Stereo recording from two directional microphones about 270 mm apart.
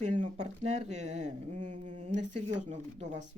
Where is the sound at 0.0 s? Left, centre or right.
Right.